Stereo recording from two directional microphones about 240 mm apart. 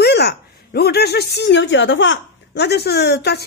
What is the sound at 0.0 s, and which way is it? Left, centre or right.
A woman's voice, left.